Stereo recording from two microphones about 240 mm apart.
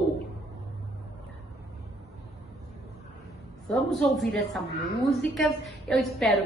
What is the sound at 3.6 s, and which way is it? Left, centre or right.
A woman's voice, centre.